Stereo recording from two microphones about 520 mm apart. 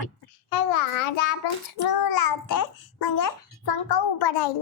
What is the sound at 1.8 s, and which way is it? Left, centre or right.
A child's voice, left.